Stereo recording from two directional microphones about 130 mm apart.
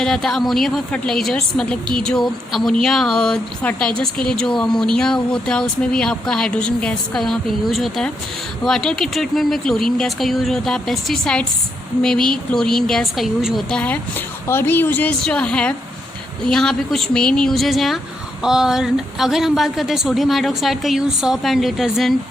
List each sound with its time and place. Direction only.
0.0 s a woman's voice: 5° left (ahead or behind)